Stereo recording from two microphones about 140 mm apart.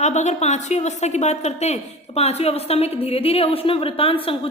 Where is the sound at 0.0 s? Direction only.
55° left (ahead or behind).